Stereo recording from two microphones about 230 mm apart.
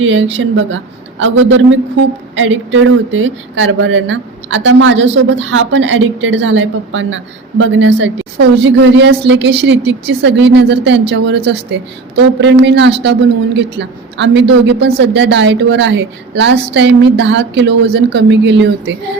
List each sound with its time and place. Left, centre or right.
0.0 s a man's voice: right